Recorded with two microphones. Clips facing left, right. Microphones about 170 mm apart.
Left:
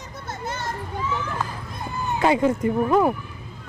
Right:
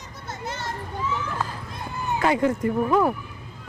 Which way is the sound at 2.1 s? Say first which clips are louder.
Left 2 dB; 20° left (ahead or behind).